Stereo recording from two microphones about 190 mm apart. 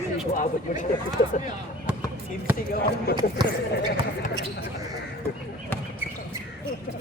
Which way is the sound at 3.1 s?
55° left (ahead or behind).